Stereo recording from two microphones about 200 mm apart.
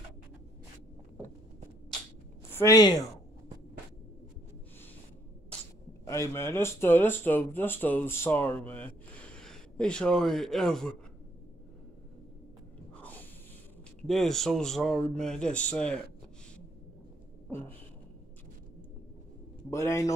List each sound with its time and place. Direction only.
2.5 s speech: 15° left (ahead or behind)
6.0 s speech: 15° left (ahead or behind)
12.9 s snort: 10° left (ahead or behind)
14.0 s speech: centre (ahead or behind)
19.7 s a man's voice: 15° left (ahead or behind)